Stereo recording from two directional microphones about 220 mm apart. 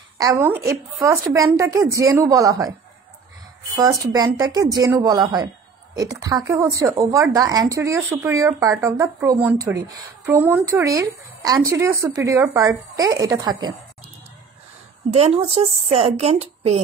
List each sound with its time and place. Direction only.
0.2 s a woman's voice: 15° right (ahead or behind)
3.7 s a woman's voice: 15° right (ahead or behind)
15.0 s speech: 30° right (ahead or behind)